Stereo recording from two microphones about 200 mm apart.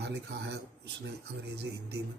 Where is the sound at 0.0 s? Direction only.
60° right (ahead or behind).